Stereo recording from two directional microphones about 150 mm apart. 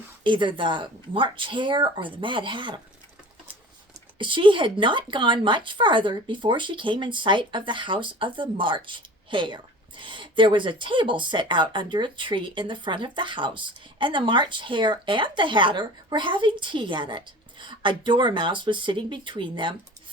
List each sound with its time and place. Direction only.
0.3 s speech: 30° right (ahead or behind)
4.2 s speech: 35° right (ahead or behind)